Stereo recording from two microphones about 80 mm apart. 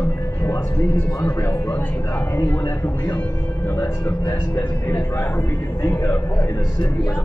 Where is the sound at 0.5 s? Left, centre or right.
Left.